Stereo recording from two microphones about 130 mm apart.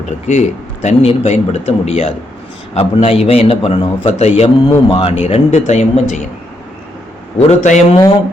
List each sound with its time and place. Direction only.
0.3 s a man's voice: 60° left (ahead or behind)
4.4 s a man's voice: 40° left (ahead or behind); by 6.2 s 65° left (ahead or behind)
7.3 s a man's voice: 60° left (ahead or behind)